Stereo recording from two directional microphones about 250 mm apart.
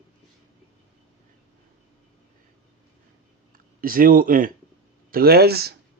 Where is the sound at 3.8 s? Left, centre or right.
Right.